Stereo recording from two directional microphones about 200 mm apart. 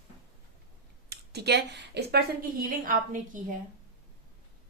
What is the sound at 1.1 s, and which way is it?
A woman's voice, 55° right (ahead or behind).